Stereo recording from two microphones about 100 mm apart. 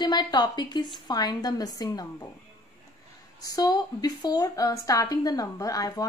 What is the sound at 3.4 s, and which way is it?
A woman's voice, 40° left (ahead or behind).